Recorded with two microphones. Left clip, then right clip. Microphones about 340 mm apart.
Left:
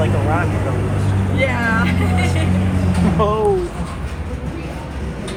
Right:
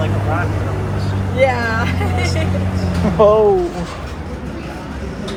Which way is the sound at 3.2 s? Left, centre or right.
Centre.